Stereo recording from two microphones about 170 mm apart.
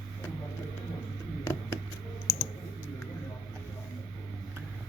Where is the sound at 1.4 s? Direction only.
15° left (ahead or behind).